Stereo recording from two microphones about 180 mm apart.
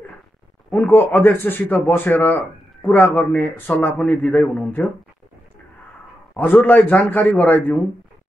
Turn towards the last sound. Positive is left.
turn(degrees=10)  # may be behind; listen again after turning